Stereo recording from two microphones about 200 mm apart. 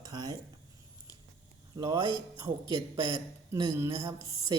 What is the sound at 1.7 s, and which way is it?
A woman's voice, 20° right (ahead or behind).